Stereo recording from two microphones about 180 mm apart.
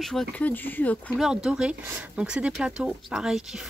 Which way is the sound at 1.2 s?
5° right (ahead or behind).